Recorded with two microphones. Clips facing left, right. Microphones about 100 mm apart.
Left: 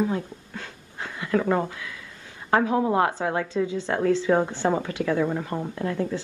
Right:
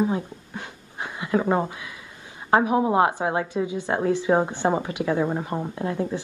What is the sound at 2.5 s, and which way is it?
A woman's voice, 20° right (ahead or behind).